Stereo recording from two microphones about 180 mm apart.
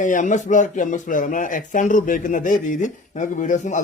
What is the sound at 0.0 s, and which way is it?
Speech, 45° left (ahead or behind).